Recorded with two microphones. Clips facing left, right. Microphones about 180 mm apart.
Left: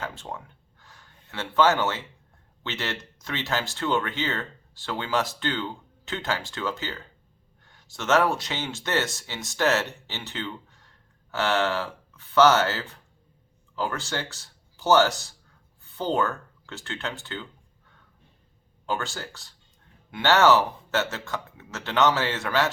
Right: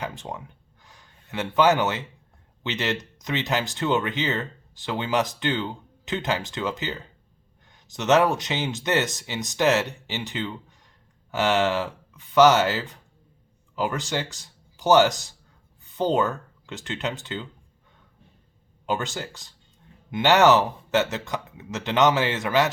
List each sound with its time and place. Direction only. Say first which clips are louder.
0.0 s a sound: right 2 dB; 15° right (ahead or behind)
2.6 s speech: right 5 dB; 15° right (ahead or behind)
18.9 s speech: right 3 dB; 20° right (ahead or behind)